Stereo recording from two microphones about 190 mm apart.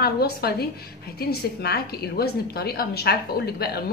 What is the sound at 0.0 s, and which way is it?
A woman's voice, 55° left (ahead or behind).